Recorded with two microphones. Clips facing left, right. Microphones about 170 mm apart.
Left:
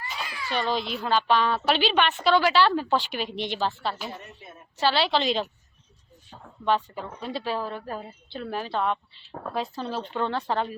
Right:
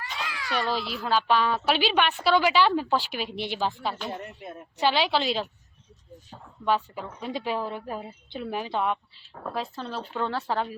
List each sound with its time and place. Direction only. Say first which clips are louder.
0.3 s a sound: even; 85° right
0.5 s a child's voice: left 1 dB; 5° right (ahead or behind)
4.1 s speech: right 5 dB; 65° right (ahead or behind)
4.8 s a woman's voice: left 1 dB; 15° right (ahead or behind)
6.7 s a woman's voice: left 1 dB; 5° right (ahead or behind)